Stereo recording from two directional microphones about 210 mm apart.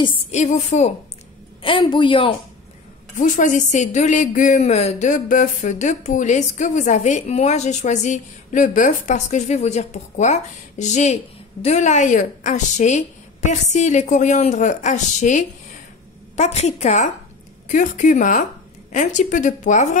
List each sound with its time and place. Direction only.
0.0 s a man's voice: 30° left (ahead or behind)
3.2 s speech: 40° left (ahead or behind)